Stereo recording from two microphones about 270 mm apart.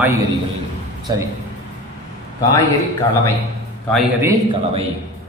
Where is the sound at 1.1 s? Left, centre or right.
Centre.